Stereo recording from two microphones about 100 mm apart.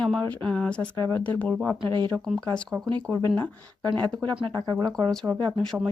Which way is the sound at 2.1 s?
5° left (ahead or behind).